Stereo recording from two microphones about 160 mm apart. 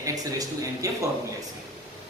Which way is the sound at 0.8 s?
20° right (ahead or behind).